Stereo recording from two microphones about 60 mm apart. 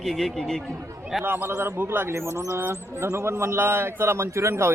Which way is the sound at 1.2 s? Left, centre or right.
Right.